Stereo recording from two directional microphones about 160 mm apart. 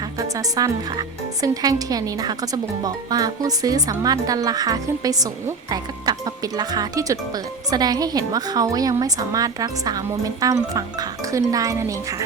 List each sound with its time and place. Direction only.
0.2 s speech: 20° right (ahead or behind)